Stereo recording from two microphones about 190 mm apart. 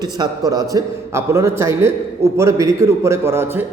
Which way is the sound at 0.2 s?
20° right (ahead or behind).